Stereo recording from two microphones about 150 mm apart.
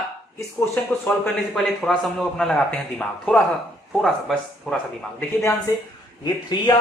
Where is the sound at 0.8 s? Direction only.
10° left (ahead or behind).